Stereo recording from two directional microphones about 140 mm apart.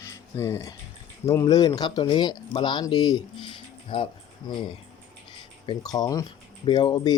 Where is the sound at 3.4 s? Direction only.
40° left (ahead or behind).